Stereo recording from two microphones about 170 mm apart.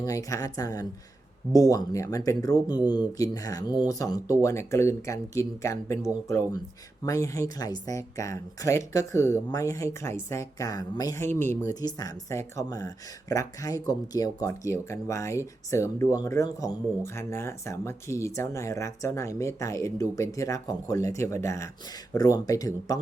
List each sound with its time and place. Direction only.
0.0 s speech: 20° left (ahead or behind)